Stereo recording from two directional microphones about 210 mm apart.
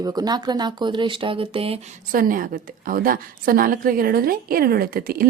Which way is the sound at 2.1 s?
40° right (ahead or behind).